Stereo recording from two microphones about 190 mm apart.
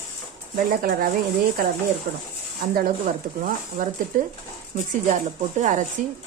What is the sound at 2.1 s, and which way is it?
Speech, 60° right (ahead or behind).